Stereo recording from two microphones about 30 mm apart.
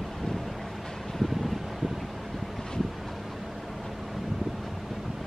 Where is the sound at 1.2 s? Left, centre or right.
Centre.